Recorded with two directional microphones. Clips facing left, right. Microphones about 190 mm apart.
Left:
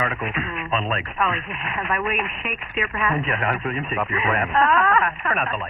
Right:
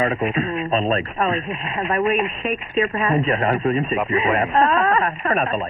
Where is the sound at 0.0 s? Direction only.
25° right (ahead or behind).